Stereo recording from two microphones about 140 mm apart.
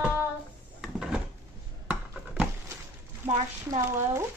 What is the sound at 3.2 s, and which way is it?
A woman's voice, 20° right (ahead or behind).